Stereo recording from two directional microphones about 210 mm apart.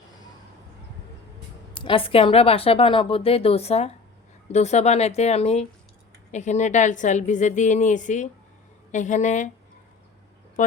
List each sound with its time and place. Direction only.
1.8 s a woman's voice: 25° left (ahead or behind)